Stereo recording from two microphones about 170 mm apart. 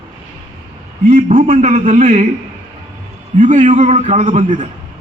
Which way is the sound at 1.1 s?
45° right (ahead or behind).